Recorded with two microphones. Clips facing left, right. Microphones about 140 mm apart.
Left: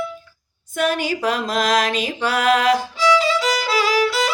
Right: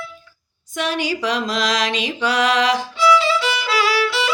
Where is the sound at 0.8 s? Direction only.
50° left (ahead or behind).